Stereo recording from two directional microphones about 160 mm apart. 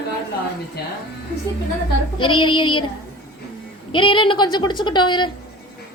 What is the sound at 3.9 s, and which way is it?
Speech, 30° left (ahead or behind).